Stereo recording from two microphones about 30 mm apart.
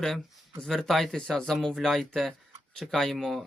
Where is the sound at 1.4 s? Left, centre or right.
Centre.